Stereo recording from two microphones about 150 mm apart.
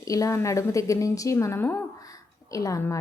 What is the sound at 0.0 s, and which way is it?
A woman's voice, 20° left (ahead or behind).